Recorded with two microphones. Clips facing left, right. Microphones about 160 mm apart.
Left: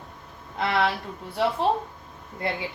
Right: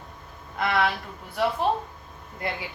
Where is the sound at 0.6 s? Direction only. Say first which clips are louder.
Even; 30° left (ahead or behind).